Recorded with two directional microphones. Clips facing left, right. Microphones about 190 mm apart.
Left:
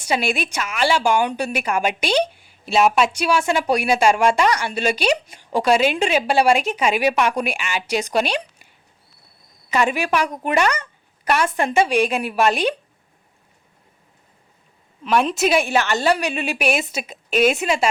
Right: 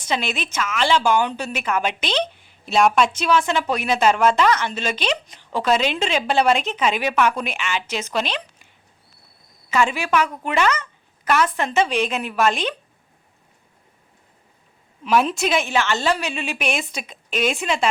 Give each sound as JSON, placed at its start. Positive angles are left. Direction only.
{"t": 0.0, "sound": "speech", "side_deg": 10}
{"t": 9.7, "sound": "speech", "side_deg": 40}
{"t": 11.5, "sound": "speech", "side_deg": 10}
{"t": 15.0, "sound": "a woman's voice", "side_deg": -5}
{"t": 15.7, "sound": "speech", "side_deg": 40}
{"t": 16.6, "sound": "speech", "side_deg": 5}